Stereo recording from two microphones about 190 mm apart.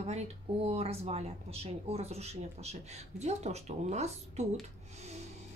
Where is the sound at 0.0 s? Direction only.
35° right (ahead or behind).